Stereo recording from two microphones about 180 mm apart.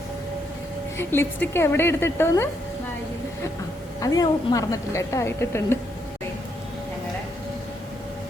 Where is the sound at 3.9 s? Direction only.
20° left (ahead or behind).